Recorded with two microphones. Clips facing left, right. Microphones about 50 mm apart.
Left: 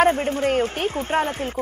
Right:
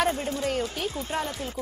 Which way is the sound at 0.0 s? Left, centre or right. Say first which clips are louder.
Left 8 dB; left.